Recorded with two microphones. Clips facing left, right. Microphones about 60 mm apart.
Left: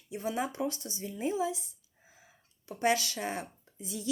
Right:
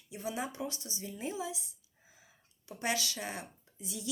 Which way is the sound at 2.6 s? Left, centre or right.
Left.